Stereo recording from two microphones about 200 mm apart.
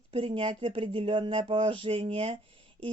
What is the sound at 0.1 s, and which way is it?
Speech, 25° right (ahead or behind).